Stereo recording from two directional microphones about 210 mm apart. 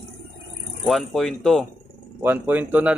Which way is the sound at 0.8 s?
Centre (ahead or behind).